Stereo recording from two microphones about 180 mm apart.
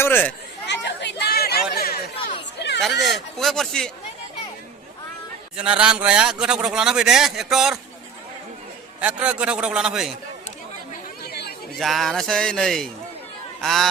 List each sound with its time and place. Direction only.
0.0 s speech: 10° left (ahead or behind)
0.7 s chatter: 75° left (ahead or behind)
1.7 s a sound: 60° left (ahead or behind)
2.6 s chatter: 70° left (ahead or behind)
3.0 s a man's voice: centre (ahead or behind)
5.5 s a man's voice: 5° right (ahead or behind)
9.0 s a man's voice: 5° right (ahead or behind)
11.2 s chatter: 60° left (ahead or behind)
11.8 s a man's voice: centre (ahead or behind)